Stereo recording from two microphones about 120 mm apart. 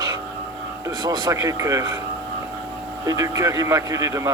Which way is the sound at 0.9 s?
35° right (ahead or behind).